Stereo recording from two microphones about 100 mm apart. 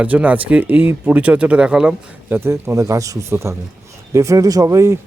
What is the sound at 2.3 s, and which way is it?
Speech, 25° right (ahead or behind).